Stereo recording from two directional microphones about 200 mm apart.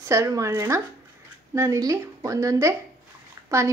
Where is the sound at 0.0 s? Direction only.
15° right (ahead or behind).